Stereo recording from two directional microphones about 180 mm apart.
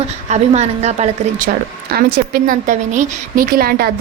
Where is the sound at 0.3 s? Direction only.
40° right (ahead or behind).